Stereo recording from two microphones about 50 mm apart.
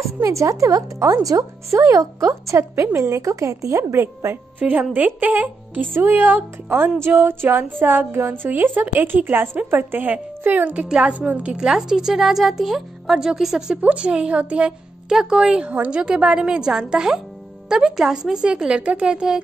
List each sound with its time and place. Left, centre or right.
0.2 s speech: right
4.6 s a woman's voice: right
7.0 s a sound: right
10.4 s a woman's voice: right
11.5 s speech: centre
13.7 s a woman's voice: right
15.0 s speech: centre